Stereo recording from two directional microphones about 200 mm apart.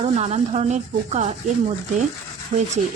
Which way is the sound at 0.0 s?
30° right (ahead or behind).